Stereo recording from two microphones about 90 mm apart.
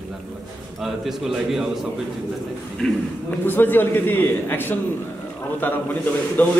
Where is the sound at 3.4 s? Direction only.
25° left (ahead or behind).